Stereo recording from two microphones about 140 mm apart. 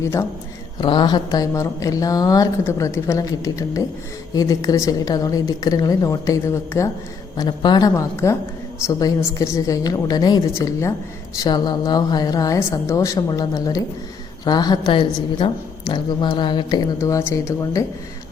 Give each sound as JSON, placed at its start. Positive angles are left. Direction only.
{"t": 0.0, "sound": "speech", "side_deg": 20}
{"t": 0.8, "sound": "speech", "side_deg": 30}
{"t": 7.3, "sound": "speech", "side_deg": 30}